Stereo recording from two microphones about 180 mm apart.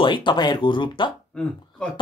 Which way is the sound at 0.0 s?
25° left (ahead or behind).